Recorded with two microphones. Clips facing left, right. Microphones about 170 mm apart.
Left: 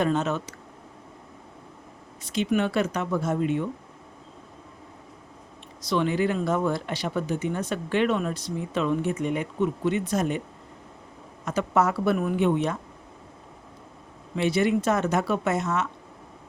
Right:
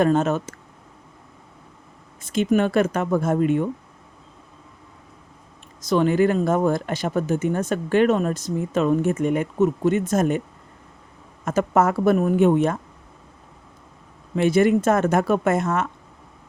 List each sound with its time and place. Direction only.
0.0 s speech: 50° right (ahead or behind)
2.2 s speech: 50° right (ahead or behind)
5.8 s speech: 45° right (ahead or behind)
11.4 s speech: 50° right (ahead or behind)
14.3 s speech: 50° right (ahead or behind)